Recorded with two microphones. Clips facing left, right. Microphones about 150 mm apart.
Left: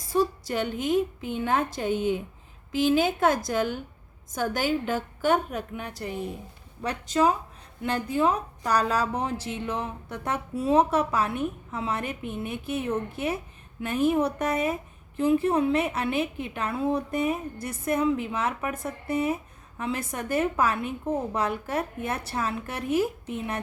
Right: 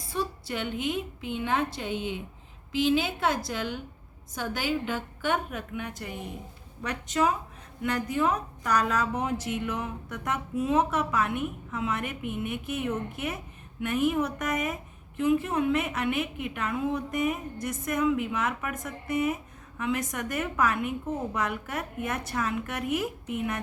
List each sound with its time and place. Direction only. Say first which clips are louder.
0.1 s a woman's voice: left 7 dB; 40° left (ahead or behind)